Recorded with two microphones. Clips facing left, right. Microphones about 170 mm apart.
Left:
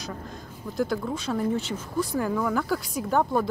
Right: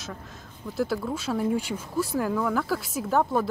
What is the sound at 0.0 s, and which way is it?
Speech, 5° right (ahead or behind).